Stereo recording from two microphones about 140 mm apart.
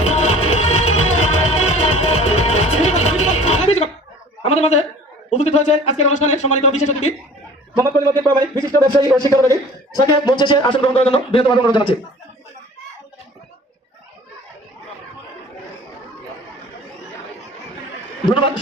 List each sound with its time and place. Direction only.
0.0 s music: 50° left (ahead or behind)
4.4 s a sound: 45° left (ahead or behind)
5.3 s a man's voice: 50° left (ahead or behind)
7.9 s a man's voice: 20° right (ahead or behind)
9.9 s speech: 30° left (ahead or behind)